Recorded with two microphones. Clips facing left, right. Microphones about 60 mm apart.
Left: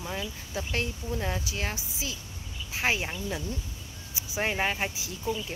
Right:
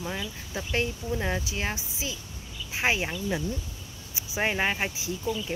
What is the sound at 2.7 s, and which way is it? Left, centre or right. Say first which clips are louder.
Speech: right 2 dB; centre.